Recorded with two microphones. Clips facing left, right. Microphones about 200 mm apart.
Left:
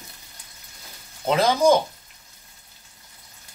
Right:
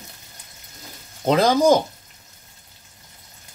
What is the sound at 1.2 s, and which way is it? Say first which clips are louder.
Speech: right 2 dB; 35° right (ahead or behind).